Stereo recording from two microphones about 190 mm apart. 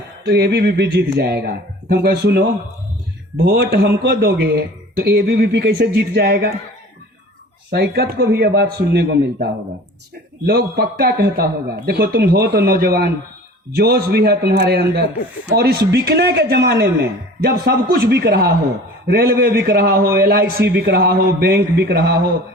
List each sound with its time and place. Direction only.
0.3 s a man's voice: 60° right (ahead or behind)
7.7 s a man's voice: 55° right (ahead or behind)